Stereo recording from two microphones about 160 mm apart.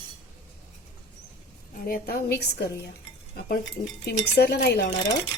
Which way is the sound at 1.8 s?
65° left (ahead or behind).